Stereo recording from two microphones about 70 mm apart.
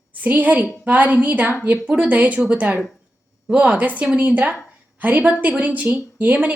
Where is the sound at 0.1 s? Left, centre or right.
Right.